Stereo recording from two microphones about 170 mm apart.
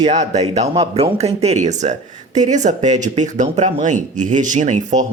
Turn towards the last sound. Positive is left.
turn(degrees=-45)  # may be behind; listen again after turning